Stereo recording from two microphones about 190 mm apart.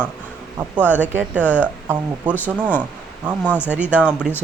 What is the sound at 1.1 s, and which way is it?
Speech, 10° right (ahead or behind).